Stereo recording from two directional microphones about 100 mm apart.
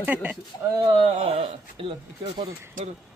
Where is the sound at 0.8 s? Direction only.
75° right (ahead or behind).